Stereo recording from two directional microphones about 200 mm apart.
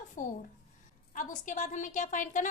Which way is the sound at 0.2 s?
40° left (ahead or behind).